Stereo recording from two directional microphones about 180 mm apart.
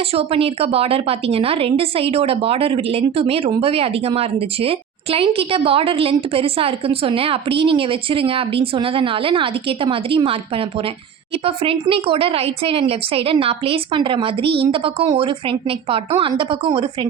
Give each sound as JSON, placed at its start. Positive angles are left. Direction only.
{"t": 0.1, "sound": "a woman's voice", "side_deg": -35}
{"t": 11.4, "sound": "a woman's voice", "side_deg": -30}